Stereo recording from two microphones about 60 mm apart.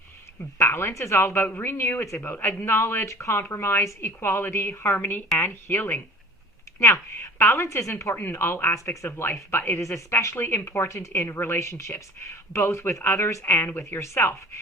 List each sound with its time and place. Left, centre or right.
0.6 s speech: left
1.5 s speech: left
1.7 s speech: left
4.9 s speech: left
6.7 s speech: left
7.2 s speech: left
8.1 s speech: left
9.0 s speech: left
11.1 s speech: left